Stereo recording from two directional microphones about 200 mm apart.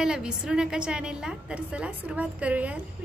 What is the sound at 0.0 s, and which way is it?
A woman's voice, 5° right (ahead or behind).